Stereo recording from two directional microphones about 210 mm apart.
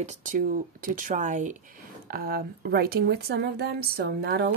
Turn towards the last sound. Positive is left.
turn(degrees=-55)  # may be behind; listen again after turning